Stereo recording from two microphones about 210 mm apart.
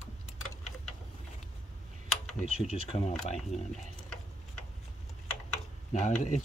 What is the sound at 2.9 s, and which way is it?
Speech, 30° left (ahead or behind).